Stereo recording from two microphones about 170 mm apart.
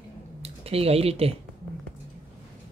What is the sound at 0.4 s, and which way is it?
Speech, 35° right (ahead or behind).